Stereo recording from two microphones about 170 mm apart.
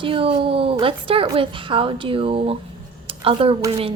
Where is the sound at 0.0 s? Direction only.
30° right (ahead or behind).